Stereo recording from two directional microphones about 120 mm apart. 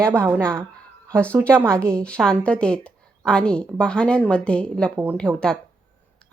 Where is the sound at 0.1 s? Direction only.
20° right (ahead or behind).